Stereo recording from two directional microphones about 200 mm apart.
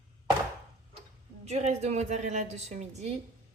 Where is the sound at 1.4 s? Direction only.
35° right (ahead or behind).